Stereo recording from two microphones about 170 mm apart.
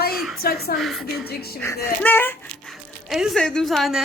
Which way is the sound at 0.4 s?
65° left (ahead or behind).